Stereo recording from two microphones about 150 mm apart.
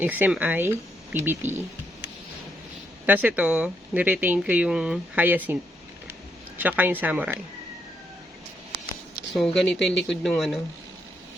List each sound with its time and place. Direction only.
0.0 s speech: 10° right (ahead or behind)
3.1 s speech: 10° right (ahead or behind)
6.6 s speech: 10° right (ahead or behind)
9.3 s speech: centre (ahead or behind)